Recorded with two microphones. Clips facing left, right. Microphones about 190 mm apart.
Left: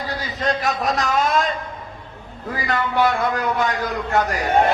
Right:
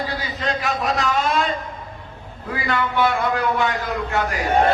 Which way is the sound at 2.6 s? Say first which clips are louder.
Left 1 dB; 40° left (ahead or behind).